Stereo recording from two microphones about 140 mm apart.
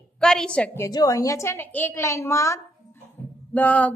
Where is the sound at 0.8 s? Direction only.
25° left (ahead or behind).